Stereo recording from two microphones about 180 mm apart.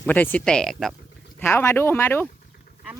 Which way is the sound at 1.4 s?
15° left (ahead or behind).